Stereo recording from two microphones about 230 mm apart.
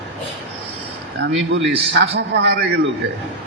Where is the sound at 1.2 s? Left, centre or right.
Right.